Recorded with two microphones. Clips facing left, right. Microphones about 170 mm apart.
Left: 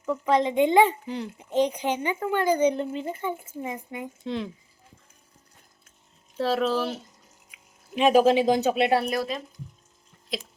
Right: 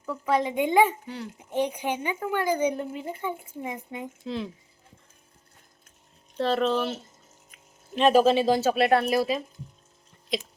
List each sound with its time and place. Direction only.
0.3 s speech: 10° right (ahead or behind)
1.0 s a child's voice: 30° left (ahead or behind)
1.6 s speech: 10° right (ahead or behind)
6.3 s speech: 5° left (ahead or behind)
9.0 s speech: 5° right (ahead or behind)